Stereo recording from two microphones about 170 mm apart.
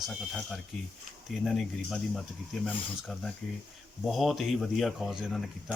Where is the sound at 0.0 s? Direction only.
Centre (ahead or behind).